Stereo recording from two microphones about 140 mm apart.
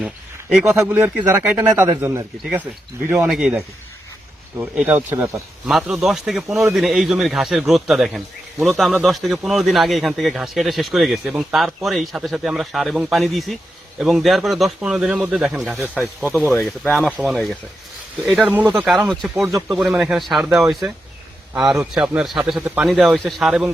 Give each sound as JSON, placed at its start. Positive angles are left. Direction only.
{"t": 0.5, "sound": "a man's voice", "side_deg": -5}
{"t": 5.6, "sound": "a man's voice", "side_deg": -5}
{"t": 19.7, "sound": "a man's voice", "side_deg": -10}